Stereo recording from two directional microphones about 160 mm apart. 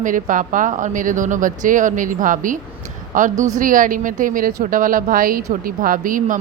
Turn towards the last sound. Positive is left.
turn(degrees=-55)  # may be behind; listen again after turning